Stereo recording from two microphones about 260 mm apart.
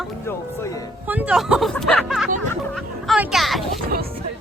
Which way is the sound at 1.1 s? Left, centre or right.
Centre.